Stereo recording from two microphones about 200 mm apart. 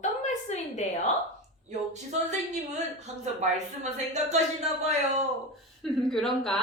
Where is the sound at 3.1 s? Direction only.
35° right (ahead or behind).